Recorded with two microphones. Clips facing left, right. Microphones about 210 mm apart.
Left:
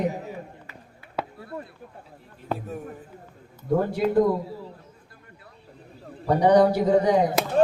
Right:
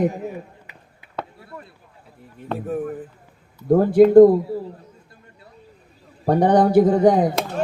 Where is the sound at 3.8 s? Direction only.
50° right (ahead or behind).